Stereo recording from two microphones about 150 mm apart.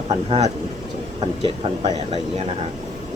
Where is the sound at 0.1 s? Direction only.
45° right (ahead or behind).